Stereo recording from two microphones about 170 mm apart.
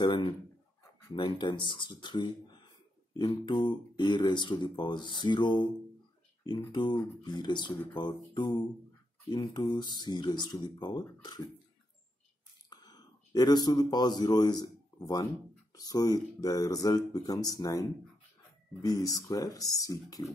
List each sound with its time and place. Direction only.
0.0 s speech: 25° left (ahead or behind)
6.7 s speech: 25° left (ahead or behind)
12.6 s speech: 25° left (ahead or behind)